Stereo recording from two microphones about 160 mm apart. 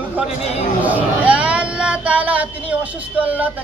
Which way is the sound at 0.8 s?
10° right (ahead or behind).